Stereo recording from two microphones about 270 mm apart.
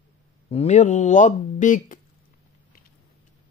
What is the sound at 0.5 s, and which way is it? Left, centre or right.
Mantra, left.